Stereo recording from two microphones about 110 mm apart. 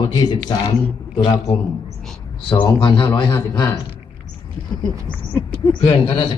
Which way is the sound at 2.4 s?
50° left (ahead or behind).